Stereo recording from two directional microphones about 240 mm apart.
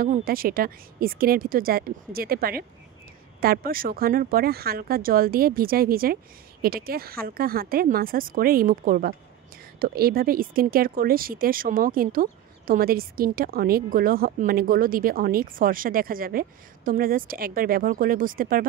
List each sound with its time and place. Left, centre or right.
0.0 s speech: right